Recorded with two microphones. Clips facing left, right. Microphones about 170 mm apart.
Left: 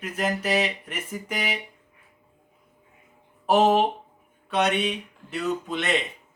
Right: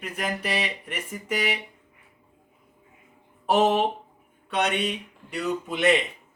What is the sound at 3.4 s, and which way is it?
Speech, 5° left (ahead or behind).